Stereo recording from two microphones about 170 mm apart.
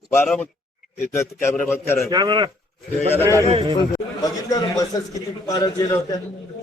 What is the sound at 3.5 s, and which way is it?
Speech, 35° right (ahead or behind).